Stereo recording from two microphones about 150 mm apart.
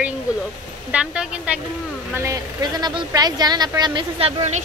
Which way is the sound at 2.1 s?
20° right (ahead or behind).